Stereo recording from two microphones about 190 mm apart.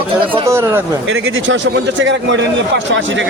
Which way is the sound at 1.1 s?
90° right.